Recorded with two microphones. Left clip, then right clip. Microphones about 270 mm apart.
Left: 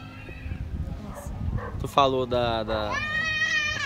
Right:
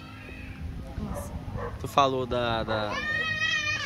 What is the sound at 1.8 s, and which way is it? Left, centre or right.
Speech, centre.